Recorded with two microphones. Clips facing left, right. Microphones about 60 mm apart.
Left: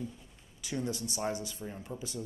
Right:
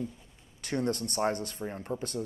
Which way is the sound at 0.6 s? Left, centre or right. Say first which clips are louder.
Right 5 dB; right.